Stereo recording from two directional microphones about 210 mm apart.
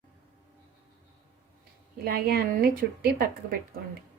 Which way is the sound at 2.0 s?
45° right (ahead or behind).